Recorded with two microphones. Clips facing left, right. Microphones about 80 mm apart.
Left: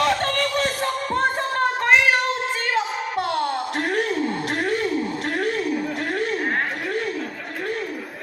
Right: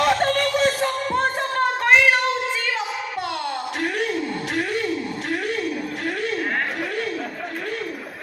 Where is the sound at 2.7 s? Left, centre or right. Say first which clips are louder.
Left 3 dB; left.